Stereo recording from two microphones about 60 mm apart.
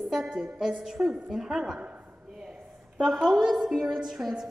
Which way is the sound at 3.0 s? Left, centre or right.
Centre.